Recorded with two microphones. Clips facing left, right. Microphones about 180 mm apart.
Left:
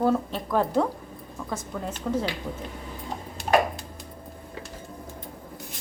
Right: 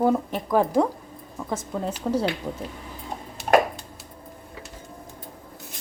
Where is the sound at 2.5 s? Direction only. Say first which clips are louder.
Right 2 dB; 40° right (ahead or behind).